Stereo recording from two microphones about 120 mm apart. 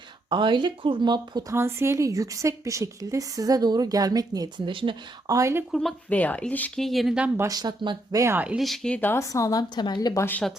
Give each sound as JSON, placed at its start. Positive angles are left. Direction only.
{"t": 0.3, "sound": "speech", "side_deg": -40}
{"t": 1.5, "sound": "a woman's voice", "side_deg": -20}
{"t": 5.3, "sound": "a woman's voice", "side_deg": -25}
{"t": 6.1, "sound": "speech", "side_deg": 15}
{"t": 6.8, "sound": "speech", "side_deg": 0}
{"t": 7.3, "sound": "speech", "side_deg": -30}
{"t": 8.1, "sound": "a woman's voice", "side_deg": -25}
{"t": 8.4, "sound": "speech", "side_deg": -5}
{"t": 9.3, "sound": "a woman's voice", "side_deg": 30}
{"t": 10.2, "sound": "speech", "side_deg": 15}